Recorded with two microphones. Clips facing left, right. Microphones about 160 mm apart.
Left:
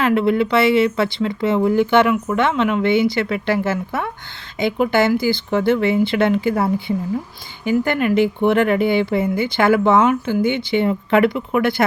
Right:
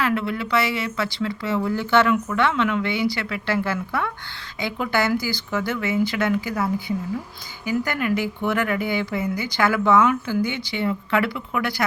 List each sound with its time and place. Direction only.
0.0 s speech: 25° left (ahead or behind)